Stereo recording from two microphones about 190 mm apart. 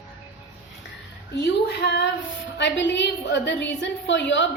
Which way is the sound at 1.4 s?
60° left (ahead or behind).